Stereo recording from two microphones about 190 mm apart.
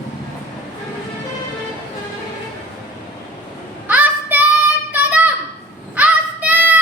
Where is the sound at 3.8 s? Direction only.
10° right (ahead or behind).